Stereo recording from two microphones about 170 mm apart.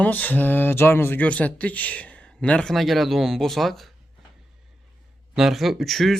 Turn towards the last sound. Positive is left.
turn(degrees=0)  # may be behind; listen again after turning